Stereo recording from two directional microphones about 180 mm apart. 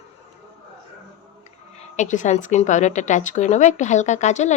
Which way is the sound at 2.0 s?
40° left (ahead or behind).